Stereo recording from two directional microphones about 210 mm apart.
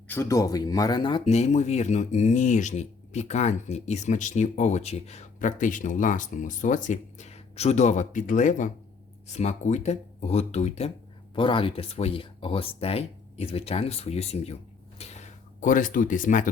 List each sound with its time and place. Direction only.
0.1 s speech: 15° left (ahead or behind); by 16.5 s 40° left (ahead or behind)